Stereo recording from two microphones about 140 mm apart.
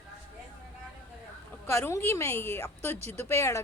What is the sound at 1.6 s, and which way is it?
A woman's voice, 20° left (ahead or behind).